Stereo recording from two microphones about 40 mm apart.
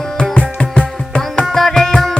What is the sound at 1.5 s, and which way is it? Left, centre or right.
Music, centre.